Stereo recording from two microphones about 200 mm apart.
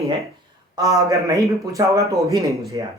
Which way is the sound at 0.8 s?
15° right (ahead or behind).